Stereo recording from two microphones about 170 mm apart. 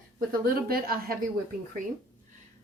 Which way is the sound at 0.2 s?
60° right (ahead or behind).